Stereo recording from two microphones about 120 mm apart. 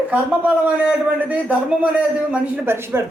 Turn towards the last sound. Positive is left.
turn(degrees=-20)  # may be behind; listen again after turning